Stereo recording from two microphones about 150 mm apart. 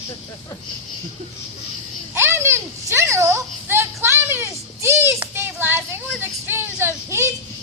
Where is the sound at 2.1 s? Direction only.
15° right (ahead or behind).